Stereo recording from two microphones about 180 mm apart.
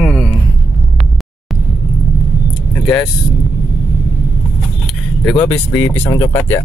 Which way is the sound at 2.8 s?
5° left (ahead or behind).